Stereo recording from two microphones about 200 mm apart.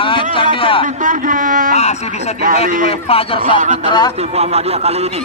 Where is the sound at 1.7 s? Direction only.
35° left (ahead or behind).